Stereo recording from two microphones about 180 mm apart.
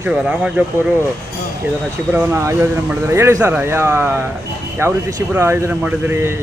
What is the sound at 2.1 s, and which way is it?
Speech, 10° right (ahead or behind).